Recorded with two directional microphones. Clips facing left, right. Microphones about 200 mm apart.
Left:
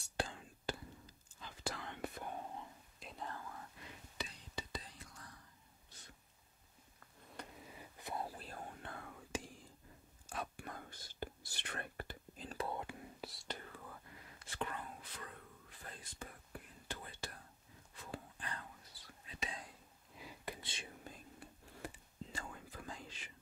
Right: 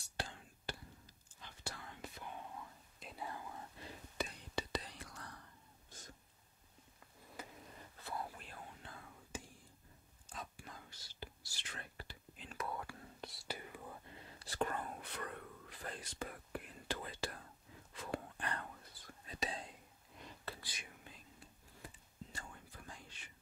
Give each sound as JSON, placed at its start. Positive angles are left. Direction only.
{"t": 1.6, "sound": "whispering", "side_deg": 90}
{"t": 3.0, "sound": "whispering", "side_deg": -5}
{"t": 4.2, "sound": "whispering", "side_deg": -60}
{"t": 5.9, "sound": "a sound", "side_deg": -45}
{"t": 7.3, "sound": "a sound", "side_deg": 0}
{"t": 8.0, "sound": "whispering", "side_deg": 20}
{"t": 8.3, "sound": "whispering", "side_deg": 35}
{"t": 8.8, "sound": "whispering", "side_deg": 65}
{"t": 10.3, "sound": "whispering", "side_deg": 65}
{"t": 12.4, "sound": "whispering", "side_deg": 35}
{"t": 13.2, "sound": "whispering", "side_deg": 0}
{"t": 17.9, "sound": "whispering", "side_deg": -80}
{"t": 20.2, "sound": "whispering", "side_deg": 10}
{"t": 21.4, "sound": "whispering", "side_deg": 70}